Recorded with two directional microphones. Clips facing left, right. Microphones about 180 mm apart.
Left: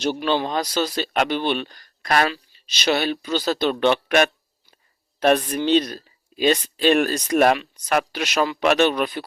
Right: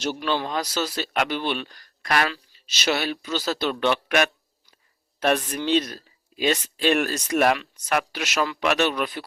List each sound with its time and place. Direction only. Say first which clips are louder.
0.0 s speech: left 4 dB; 25° left (ahead or behind)